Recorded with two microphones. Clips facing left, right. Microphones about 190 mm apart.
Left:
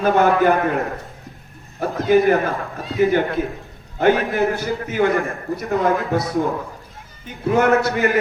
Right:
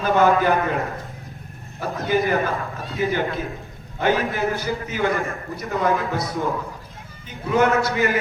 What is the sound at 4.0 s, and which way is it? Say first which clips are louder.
A man's voice: left 4 dB; 55° left (ahead or behind).